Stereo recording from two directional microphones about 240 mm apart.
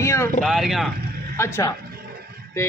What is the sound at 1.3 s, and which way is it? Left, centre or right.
Speech, centre.